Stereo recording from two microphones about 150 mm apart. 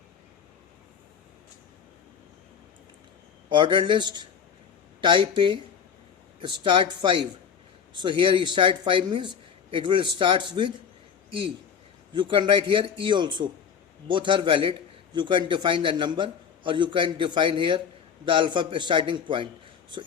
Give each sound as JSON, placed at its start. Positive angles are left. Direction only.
{"t": 3.5, "sound": "a man's voice", "side_deg": -30}
{"t": 12.1, "sound": "a man's voice", "side_deg": -35}